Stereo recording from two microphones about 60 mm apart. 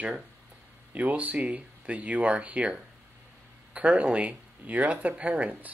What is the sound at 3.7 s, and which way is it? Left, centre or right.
Speech, right.